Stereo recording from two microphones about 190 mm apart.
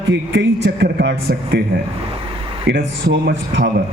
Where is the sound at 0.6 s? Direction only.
60° right (ahead or behind).